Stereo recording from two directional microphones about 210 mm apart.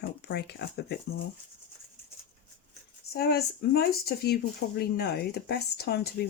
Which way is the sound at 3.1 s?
50° left (ahead or behind).